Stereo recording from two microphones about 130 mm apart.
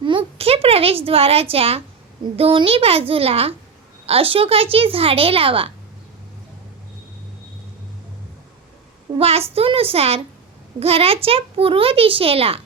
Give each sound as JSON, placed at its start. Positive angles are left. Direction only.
{"t": 0.0, "sound": "a sound", "side_deg": -40}
{"t": 2.3, "sound": "a child's voice", "side_deg": -45}
{"t": 9.1, "sound": "a woman's voice", "side_deg": -50}